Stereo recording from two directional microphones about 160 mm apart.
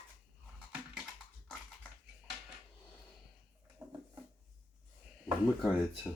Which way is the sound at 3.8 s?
15° right (ahead or behind).